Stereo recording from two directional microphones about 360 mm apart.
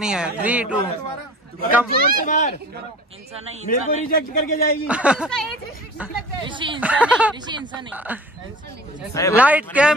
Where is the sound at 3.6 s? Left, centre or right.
Left.